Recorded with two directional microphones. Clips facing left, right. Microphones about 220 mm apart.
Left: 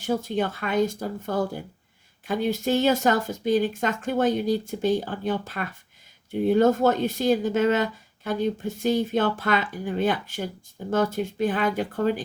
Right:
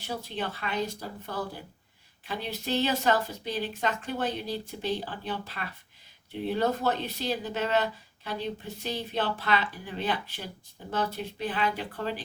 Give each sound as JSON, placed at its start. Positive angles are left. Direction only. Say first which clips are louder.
{"t": 0.0, "sound": "speech", "louder": "left 9 dB", "side_deg": 45}